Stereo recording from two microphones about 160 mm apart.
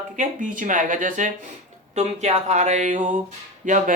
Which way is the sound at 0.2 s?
55° right (ahead or behind).